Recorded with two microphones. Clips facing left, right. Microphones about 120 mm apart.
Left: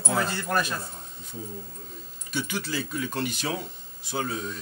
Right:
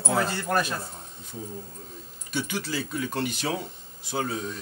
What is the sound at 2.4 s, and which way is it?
Speech, 40° right (ahead or behind).